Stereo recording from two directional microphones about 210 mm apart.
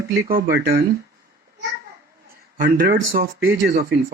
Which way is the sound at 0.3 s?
45° right (ahead or behind).